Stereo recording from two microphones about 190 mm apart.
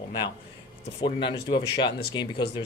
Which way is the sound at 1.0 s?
25° left (ahead or behind).